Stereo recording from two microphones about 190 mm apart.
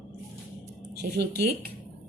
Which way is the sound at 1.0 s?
55° right (ahead or behind).